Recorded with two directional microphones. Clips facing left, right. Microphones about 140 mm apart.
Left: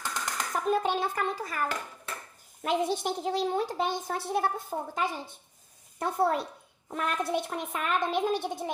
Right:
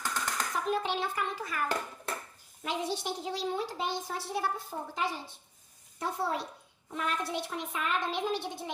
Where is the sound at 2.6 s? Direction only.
55° left (ahead or behind).